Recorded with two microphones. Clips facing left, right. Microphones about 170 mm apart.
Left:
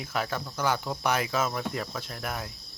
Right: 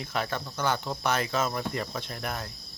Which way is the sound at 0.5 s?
10° left (ahead or behind).